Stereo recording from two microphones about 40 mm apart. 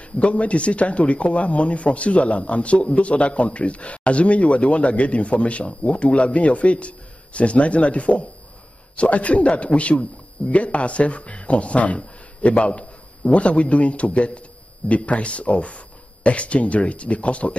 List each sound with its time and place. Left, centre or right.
0.2 s speech: left